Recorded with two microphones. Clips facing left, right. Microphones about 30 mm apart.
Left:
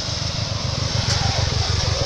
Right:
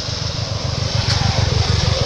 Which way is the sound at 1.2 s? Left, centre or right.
Centre.